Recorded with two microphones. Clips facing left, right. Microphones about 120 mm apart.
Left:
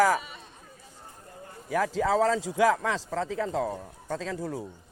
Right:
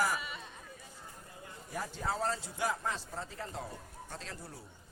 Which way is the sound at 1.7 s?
90° left.